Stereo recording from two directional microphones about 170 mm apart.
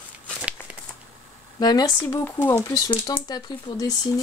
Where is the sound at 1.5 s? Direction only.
25° left (ahead or behind).